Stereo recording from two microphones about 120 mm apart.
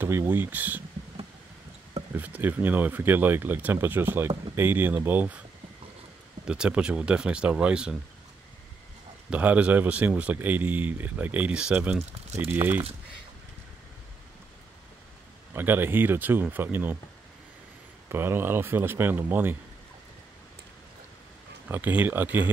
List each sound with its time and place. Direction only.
0.0 s speech: 20° right (ahead or behind)
2.1 s speech: 15° right (ahead or behind)
6.4 s speech: 5° right (ahead or behind)
9.3 s speech: 10° right (ahead or behind)
15.5 s speech: 15° right (ahead or behind)
18.0 s speech: 20° right (ahead or behind)
21.6 s speech: 15° right (ahead or behind)